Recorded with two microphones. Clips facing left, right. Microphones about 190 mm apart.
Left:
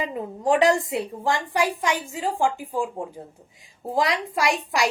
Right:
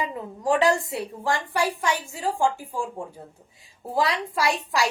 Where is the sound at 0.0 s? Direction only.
20° left (ahead or behind).